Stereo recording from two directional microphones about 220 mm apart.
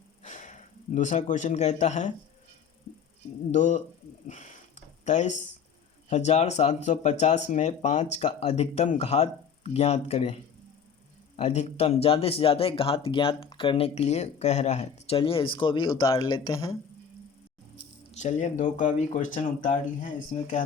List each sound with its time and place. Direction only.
0.2 s a man's voice: 35° left (ahead or behind)
3.5 s speech: 30° left (ahead or behind)
4.3 s a sound: 30° left (ahead or behind)
6.1 s speech: 30° left (ahead or behind)
11.3 s speech: 30° left (ahead or behind)
18.2 s speech: 35° left (ahead or behind)